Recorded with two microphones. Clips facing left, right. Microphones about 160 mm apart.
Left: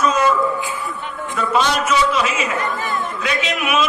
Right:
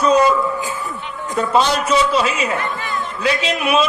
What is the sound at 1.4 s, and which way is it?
A man's voice, 30° right (ahead or behind).